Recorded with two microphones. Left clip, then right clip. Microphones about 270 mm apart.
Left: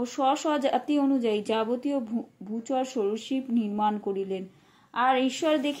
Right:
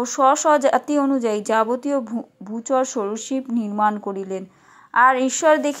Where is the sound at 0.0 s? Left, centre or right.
Centre.